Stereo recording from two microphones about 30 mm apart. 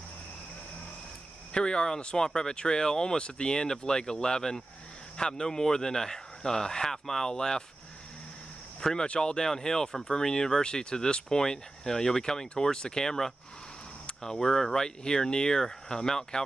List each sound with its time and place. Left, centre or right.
1.5 s speech: left
2.1 s speech: left
7.3 s speech: left
9.0 s speech: left
9.5 s speech: centre